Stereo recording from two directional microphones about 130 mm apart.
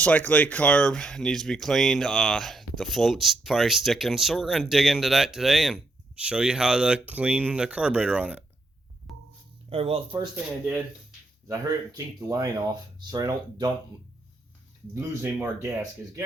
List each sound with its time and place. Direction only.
0.0 s speech: 10° left (ahead or behind); by 8.4 s 10° right (ahead or behind)
9.1 s music: centre (ahead or behind)
9.6 s speech: 45° right (ahead or behind)
11.4 s speech: 25° right (ahead or behind)
14.9 s speech: 20° right (ahead or behind)